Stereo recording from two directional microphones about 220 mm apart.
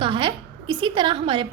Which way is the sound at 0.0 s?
25° right (ahead or behind).